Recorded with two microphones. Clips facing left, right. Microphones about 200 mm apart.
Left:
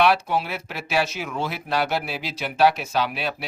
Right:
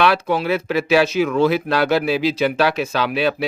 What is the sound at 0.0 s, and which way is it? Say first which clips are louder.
Speech: right 3 dB; 90° right.